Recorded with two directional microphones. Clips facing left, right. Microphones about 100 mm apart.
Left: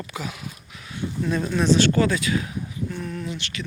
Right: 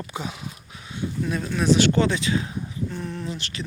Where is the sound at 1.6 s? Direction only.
15° right (ahead or behind).